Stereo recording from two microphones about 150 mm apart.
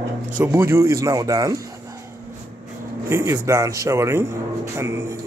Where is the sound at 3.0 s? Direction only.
20° right (ahead or behind).